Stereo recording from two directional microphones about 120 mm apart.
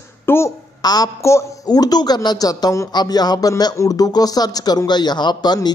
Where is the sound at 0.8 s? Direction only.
30° left (ahead or behind).